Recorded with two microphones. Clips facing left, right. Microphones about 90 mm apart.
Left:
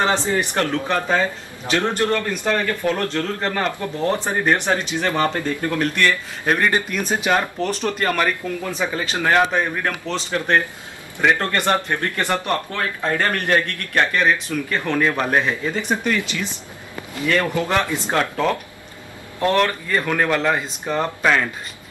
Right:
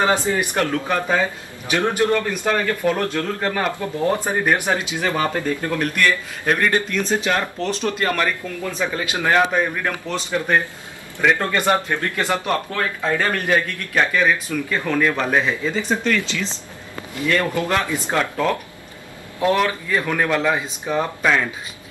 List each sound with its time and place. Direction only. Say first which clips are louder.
0.4 s a man's voice: even; 5° right (ahead or behind)
6.4 s a man's voice: even; 10° left (ahead or behind)
9.0 s a man's voice: even; 5° right (ahead or behind)
15.0 s speech: even; 10° left (ahead or behind)
17.7 s a man's voice: left 2 dB; centre (ahead or behind)
19.4 s a man's voice: even; 5° right (ahead or behind)